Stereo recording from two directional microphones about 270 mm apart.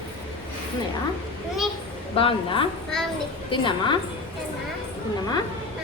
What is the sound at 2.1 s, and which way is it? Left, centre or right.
A woman's voice, centre.